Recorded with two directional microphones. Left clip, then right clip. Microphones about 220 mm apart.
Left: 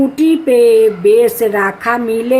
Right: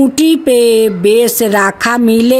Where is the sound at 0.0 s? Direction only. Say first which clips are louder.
Right 2 dB; 50° right (ahead or behind).